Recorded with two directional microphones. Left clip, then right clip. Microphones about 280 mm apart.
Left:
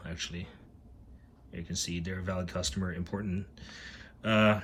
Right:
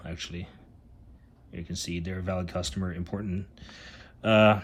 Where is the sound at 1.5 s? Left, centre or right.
Centre.